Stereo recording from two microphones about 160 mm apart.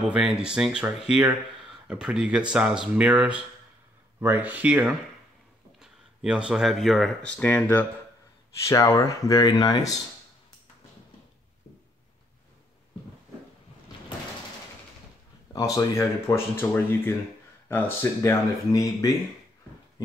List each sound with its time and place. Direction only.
0.1 s speech: 5° right (ahead or behind); by 9.9 s 25° left (ahead or behind)
15.5 s speech: 20° left (ahead or behind)